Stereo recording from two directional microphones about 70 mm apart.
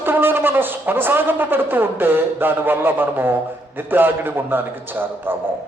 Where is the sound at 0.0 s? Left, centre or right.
Right.